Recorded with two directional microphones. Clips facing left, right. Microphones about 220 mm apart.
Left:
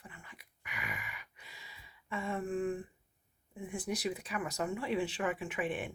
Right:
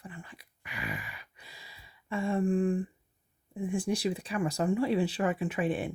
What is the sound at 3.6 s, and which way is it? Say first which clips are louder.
Speech: right 6 dB; 30° right (ahead or behind).